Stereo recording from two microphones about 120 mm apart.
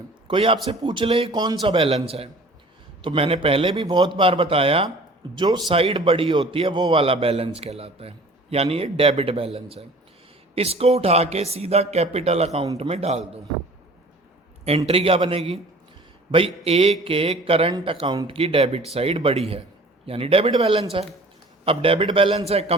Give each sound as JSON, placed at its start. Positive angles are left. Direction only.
{"t": 0.3, "sound": "speech", "side_deg": -45}
{"t": 1.3, "sound": "a man's voice", "side_deg": -35}
{"t": 1.6, "sound": "speech", "side_deg": -45}
{"t": 3.8, "sound": "a man's voice", "side_deg": -35}
{"t": 4.2, "sound": "speech", "side_deg": -50}
{"t": 5.3, "sound": "a man's voice", "side_deg": -40}
{"t": 5.7, "sound": "a man's voice", "side_deg": -50}
{"t": 14.8, "sound": "speech", "side_deg": -50}
{"t": 16.6, "sound": "speech", "side_deg": -60}
{"t": 18.0, "sound": "a man's voice", "side_deg": -40}
{"t": 18.3, "sound": "a man's voice", "side_deg": -55}
{"t": 19.1, "sound": "a man's voice", "side_deg": -50}